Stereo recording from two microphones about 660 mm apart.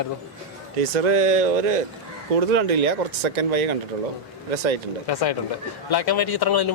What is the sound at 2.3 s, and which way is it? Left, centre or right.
Speech, right.